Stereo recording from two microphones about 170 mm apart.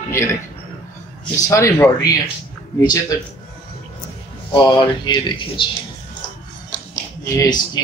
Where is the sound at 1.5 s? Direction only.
15° left (ahead or behind).